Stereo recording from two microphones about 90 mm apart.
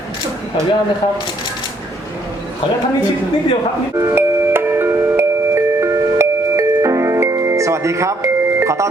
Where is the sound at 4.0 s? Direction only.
30° right (ahead or behind).